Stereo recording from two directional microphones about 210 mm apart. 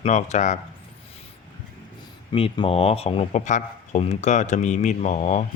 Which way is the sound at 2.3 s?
25° left (ahead or behind).